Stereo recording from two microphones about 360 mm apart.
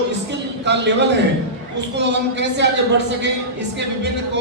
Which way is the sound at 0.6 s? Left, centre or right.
Right.